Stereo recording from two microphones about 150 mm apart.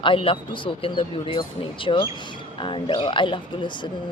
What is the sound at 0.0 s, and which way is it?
Speech, 35° left (ahead or behind).